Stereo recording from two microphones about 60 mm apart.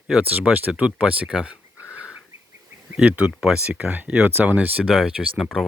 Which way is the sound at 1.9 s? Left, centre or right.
Centre.